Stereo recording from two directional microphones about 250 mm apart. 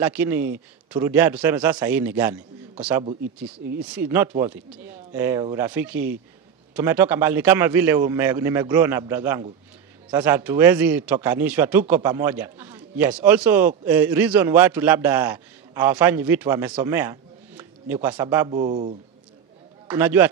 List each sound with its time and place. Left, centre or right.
0.0 s speech: centre
3.4 s speech: centre
4.3 s speech: centre
18.5 s speech: right
19.9 s speech: centre